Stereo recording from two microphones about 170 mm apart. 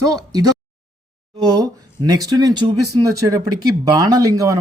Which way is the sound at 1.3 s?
20° right (ahead or behind).